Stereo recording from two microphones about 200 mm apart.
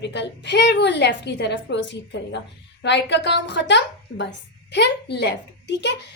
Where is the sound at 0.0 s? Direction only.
60° left (ahead or behind).